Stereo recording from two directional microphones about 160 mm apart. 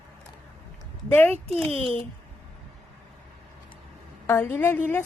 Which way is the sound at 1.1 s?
10° left (ahead or behind).